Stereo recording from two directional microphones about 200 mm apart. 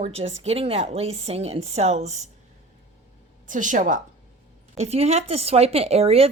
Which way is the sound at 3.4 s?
40° right (ahead or behind).